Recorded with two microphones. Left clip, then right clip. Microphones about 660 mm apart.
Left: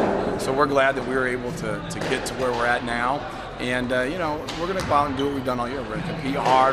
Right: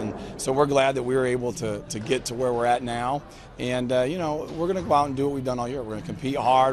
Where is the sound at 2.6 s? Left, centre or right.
Right.